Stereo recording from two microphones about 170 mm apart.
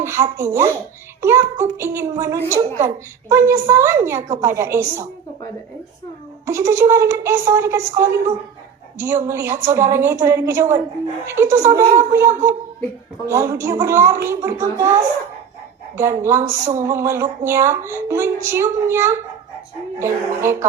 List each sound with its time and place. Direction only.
0.0 s a woman's voice: 15° right (ahead or behind)
6.4 s a woman's voice: 15° right (ahead or behind)
16.0 s a woman's voice: 15° right (ahead or behind)
16.4 s speech: 45° right (ahead or behind)
16.8 s a woman's voice: 15° right (ahead or behind)